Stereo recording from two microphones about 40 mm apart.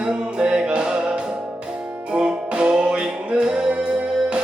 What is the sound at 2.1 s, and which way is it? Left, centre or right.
Music, right.